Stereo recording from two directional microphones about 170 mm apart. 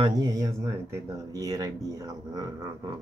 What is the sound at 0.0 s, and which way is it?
Speech, 20° right (ahead or behind).